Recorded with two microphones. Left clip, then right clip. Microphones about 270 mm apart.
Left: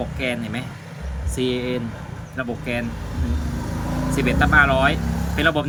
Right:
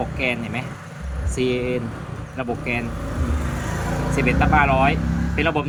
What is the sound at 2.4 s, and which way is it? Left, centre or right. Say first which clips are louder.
Speech: right 1 dB; centre.